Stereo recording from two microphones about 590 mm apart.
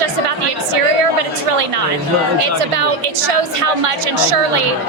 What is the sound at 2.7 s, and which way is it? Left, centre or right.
A woman's voice, right.